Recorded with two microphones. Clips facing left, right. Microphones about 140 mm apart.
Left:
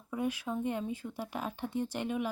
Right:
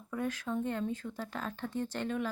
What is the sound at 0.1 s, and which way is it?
Speech, 10° left (ahead or behind).